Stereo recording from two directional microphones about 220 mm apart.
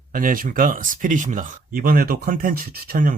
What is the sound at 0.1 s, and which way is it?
Speech, 40° right (ahead or behind).